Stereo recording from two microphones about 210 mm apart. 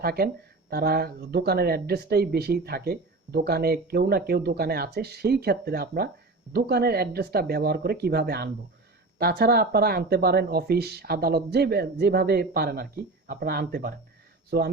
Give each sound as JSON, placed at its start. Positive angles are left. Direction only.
{"t": 0.0, "sound": "speech", "side_deg": -50}